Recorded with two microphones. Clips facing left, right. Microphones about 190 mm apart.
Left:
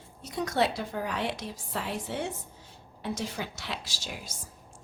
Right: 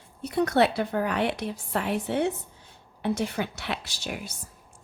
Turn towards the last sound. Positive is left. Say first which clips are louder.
# right 6 dB
turn(degrees=-60)  # may be behind; listen again after turning